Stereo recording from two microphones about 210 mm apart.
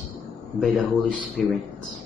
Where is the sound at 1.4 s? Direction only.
Centre (ahead or behind).